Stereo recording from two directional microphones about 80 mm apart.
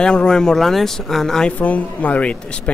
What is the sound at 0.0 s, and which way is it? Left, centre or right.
Speech, centre.